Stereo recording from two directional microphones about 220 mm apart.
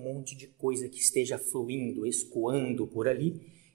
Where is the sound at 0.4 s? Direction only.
45° right (ahead or behind).